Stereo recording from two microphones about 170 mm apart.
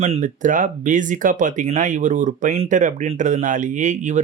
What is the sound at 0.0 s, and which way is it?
Speech, 45° right (ahead or behind).